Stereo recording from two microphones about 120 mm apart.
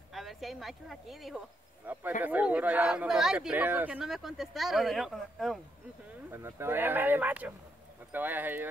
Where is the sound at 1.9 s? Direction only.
15° right (ahead or behind); by 5.6 s centre (ahead or behind).